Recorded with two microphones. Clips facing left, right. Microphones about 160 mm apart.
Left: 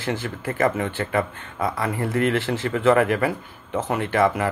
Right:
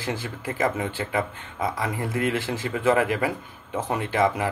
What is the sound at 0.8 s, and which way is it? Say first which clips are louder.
Speech: left 3 dB; 10° right (ahead or behind).